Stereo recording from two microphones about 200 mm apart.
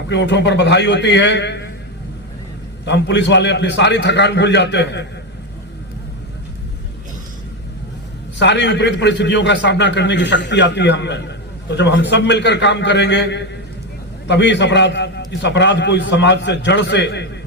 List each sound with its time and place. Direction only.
0.1 s a man's voice: 60° left (ahead or behind)
2.8 s a man's voice: 60° left (ahead or behind)
8.4 s a man's voice: 60° left (ahead or behind)